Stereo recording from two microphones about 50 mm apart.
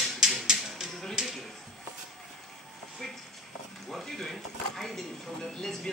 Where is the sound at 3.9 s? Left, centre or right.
Centre.